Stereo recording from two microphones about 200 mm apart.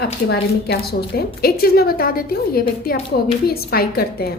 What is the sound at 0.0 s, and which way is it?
A woman's voice, 55° left (ahead or behind).